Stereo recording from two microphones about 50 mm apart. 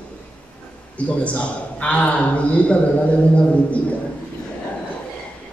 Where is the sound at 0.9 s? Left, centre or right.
Left.